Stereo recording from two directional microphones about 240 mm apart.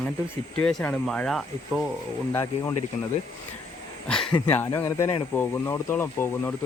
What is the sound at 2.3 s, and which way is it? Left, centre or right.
Speech, centre.